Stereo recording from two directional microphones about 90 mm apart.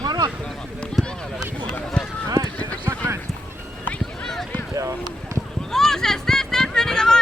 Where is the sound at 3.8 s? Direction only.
15° left (ahead or behind).